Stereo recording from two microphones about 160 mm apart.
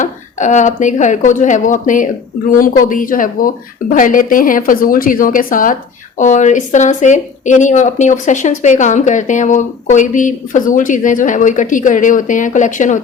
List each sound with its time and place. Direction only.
0.0 s speech: 50° left (ahead or behind)